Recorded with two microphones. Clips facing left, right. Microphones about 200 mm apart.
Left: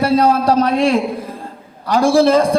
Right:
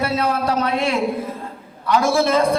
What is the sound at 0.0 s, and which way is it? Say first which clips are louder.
A man's voice: left 7 dB; 35° left (ahead or behind).